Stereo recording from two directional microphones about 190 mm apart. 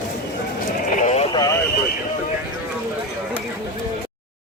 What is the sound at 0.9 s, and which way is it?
Vehicle, 35° left (ahead or behind).